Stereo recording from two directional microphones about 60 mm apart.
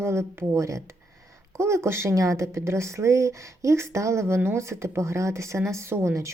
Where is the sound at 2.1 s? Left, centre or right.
Right.